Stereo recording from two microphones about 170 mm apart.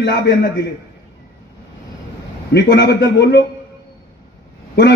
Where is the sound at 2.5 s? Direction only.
80° left.